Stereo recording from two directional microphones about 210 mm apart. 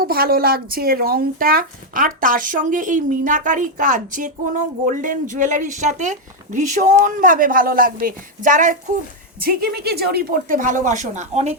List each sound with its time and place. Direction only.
0.0 s speech: 45° right (ahead or behind)